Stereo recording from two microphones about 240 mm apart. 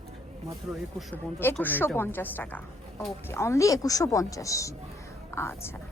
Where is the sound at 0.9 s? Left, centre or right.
Centre.